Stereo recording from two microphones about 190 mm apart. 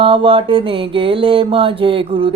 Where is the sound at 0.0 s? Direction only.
30° right (ahead or behind).